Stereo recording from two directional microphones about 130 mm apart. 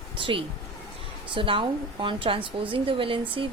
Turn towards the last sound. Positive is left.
turn(degrees=-40)  # may be behind; listen again after turning